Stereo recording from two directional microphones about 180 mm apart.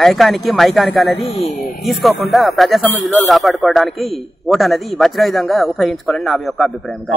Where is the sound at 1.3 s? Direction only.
35° left (ahead or behind).